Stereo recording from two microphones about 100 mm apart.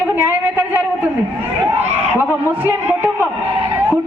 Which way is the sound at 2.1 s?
20° right (ahead or behind).